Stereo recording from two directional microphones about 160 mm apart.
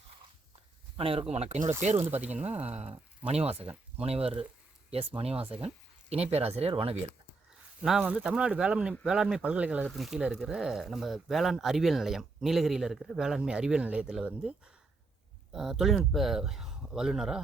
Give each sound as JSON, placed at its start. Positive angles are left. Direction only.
{"t": 0.9, "sound": "speech", "side_deg": -35}
{"t": 2.0, "sound": "speech", "side_deg": -10}
{"t": 2.3, "sound": "speech", "side_deg": -45}
{"t": 3.6, "sound": "speech", "side_deg": -10}
{"t": 4.0, "sound": "speech", "side_deg": -40}
{"t": 7.8, "sound": "speech", "side_deg": -5}